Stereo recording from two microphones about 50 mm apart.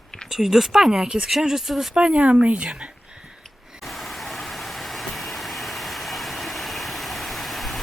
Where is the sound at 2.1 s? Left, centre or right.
Right.